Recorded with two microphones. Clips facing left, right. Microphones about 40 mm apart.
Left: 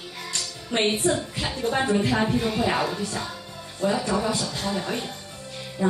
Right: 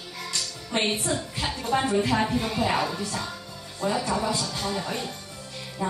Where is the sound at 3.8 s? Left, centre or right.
Left.